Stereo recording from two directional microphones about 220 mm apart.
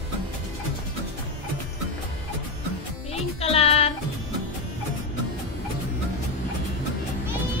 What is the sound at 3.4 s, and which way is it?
Music, 25° left (ahead or behind).